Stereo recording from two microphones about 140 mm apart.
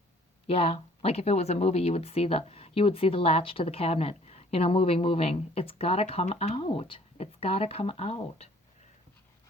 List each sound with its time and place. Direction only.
0.4 s speech: 40° left (ahead or behind)